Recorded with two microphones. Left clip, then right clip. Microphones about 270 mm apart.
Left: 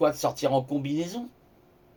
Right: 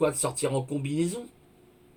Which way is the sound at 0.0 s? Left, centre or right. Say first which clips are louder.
Left 3 dB; centre.